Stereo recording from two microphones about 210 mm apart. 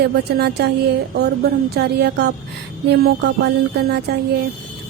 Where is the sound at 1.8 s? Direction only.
50° right (ahead or behind).